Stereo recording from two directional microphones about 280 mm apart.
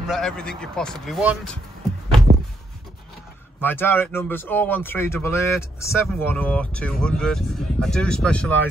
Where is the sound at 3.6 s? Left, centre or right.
Centre.